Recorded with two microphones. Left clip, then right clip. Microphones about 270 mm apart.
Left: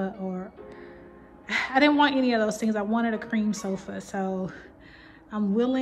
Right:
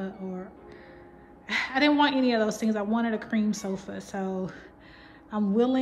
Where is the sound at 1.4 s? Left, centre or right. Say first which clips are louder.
Left 2 dB; centre.